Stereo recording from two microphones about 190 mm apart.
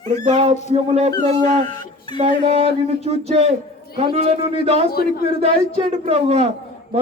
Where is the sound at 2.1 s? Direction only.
30° right (ahead or behind).